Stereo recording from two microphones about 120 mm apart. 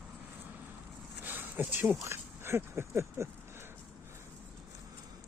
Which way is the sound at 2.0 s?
20° right (ahead or behind).